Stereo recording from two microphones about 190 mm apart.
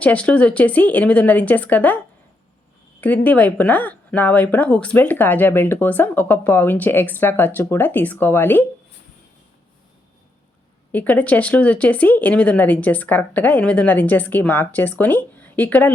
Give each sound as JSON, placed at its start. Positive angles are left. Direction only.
{"t": 0.0, "sound": "speech", "side_deg": 5}
{"t": 3.0, "sound": "speech", "side_deg": 10}
{"t": 10.9, "sound": "speech", "side_deg": 10}